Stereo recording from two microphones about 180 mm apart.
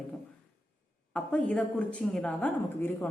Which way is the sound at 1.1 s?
5° left (ahead or behind).